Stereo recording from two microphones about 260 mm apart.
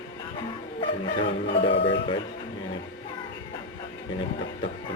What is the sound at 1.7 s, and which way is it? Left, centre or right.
Music, left.